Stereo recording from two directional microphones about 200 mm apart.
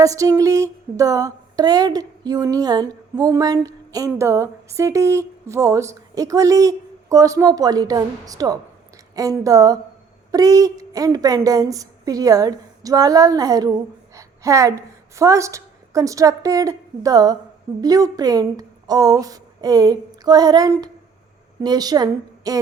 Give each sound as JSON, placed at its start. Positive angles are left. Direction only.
{"t": 0.0, "sound": "a woman's voice", "side_deg": -15}